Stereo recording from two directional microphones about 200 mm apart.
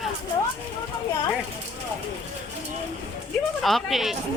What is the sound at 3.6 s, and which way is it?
Speech, centre (ahead or behind).